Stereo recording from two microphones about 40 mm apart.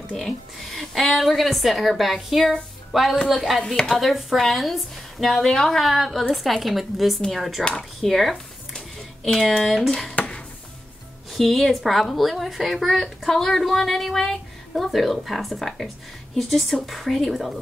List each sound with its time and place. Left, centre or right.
0.6 s a woman's voice: centre
5.4 s speech: centre
5.8 s speech: centre
9.8 s speech: centre
10.1 s a sound: left
11.3 s speech: centre